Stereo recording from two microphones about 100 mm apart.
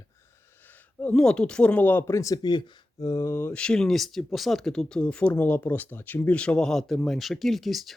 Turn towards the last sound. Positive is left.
turn(degrees=0)  # may be behind; listen again after turning